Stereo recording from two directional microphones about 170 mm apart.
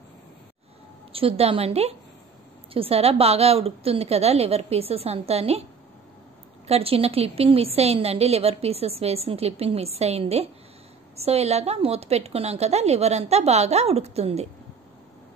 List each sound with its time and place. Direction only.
1.1 s a woman's voice: 35° right (ahead or behind)
6.7 s a woman's voice: 35° right (ahead or behind)